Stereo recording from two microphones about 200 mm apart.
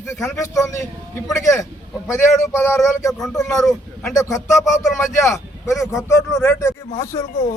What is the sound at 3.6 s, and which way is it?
Speech, centre (ahead or behind).